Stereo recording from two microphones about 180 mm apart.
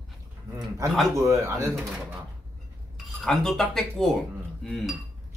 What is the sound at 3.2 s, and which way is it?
Speech, 5° left (ahead or behind).